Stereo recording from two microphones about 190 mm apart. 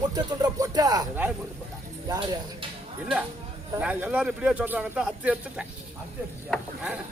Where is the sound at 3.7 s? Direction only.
10° right (ahead or behind).